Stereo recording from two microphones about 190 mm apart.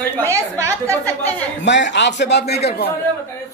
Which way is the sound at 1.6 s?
70° left (ahead or behind).